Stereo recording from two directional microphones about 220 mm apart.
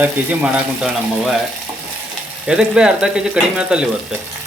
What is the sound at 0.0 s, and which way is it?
Speech, 5° right (ahead or behind).